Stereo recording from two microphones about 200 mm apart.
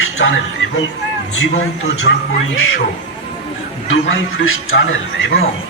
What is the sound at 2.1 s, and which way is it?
Speech, 55° left (ahead or behind).